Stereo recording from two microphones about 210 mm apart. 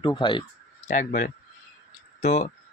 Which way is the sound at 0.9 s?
40° left (ahead or behind).